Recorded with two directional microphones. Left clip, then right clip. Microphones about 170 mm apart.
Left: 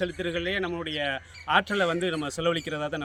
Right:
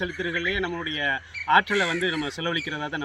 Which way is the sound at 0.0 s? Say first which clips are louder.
Right 2 dB; 35° left (ahead or behind).